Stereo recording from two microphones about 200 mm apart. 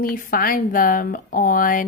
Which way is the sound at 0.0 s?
45° left (ahead or behind).